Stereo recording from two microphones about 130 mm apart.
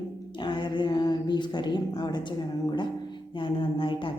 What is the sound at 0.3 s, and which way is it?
A woman's voice, 35° left (ahead or behind).